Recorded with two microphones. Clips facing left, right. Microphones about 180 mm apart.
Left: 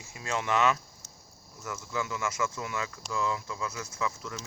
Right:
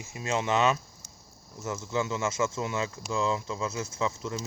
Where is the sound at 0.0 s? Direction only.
20° right (ahead or behind).